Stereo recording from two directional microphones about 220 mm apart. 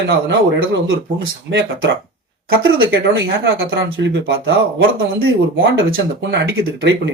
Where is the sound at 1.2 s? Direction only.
55° right (ahead or behind).